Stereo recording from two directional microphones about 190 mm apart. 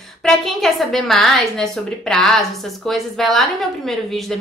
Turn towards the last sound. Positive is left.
turn(degrees=0)  # may be behind; listen again after turning